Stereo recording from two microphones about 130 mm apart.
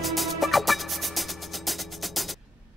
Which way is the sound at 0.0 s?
Centre (ahead or behind).